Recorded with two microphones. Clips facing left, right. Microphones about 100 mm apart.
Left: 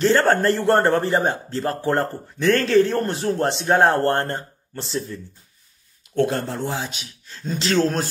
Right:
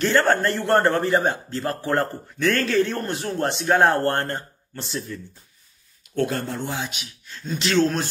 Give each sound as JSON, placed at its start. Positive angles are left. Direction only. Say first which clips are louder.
{"t": 0.0, "sound": "a man's voice", "louder": "left 2 dB", "side_deg": 30}
{"t": 6.4, "sound": "a man's voice", "louder": "left 2 dB", "side_deg": 30}